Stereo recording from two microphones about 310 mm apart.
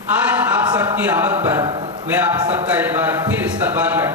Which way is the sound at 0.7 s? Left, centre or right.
Centre.